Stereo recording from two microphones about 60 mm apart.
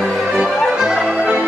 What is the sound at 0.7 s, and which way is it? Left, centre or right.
Music, centre.